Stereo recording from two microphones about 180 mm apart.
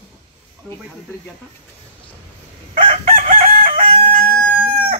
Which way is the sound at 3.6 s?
30° right (ahead or behind).